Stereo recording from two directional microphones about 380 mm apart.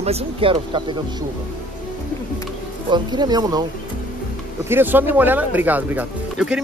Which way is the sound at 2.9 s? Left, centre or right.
Centre.